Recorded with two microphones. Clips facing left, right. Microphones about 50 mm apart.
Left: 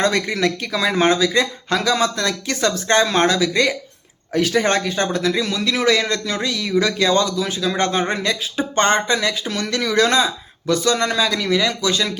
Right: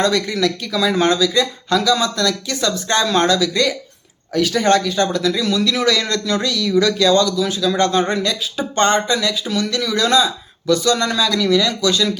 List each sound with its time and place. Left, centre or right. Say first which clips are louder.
0.0 s speech: right 1 dB; left